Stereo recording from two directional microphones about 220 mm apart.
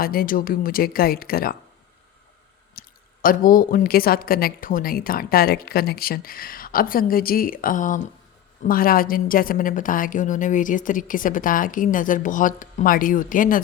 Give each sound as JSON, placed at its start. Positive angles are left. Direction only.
{"t": 0.0, "sound": "a woman's voice", "side_deg": 40}
{"t": 2.7, "sound": "a woman's voice", "side_deg": 40}